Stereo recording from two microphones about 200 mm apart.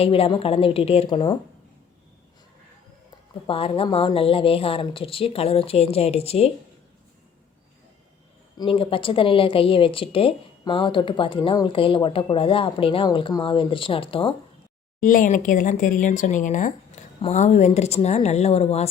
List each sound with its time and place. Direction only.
0.0 s a woman's voice: 30° left (ahead or behind)
3.4 s a woman's voice: 25° left (ahead or behind)
8.5 s a woman's voice: 25° left (ahead or behind)
15.0 s speech: 40° left (ahead or behind)